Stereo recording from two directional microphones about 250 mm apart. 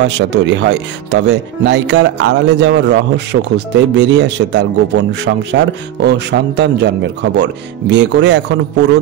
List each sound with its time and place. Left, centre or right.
0.0 s speech: right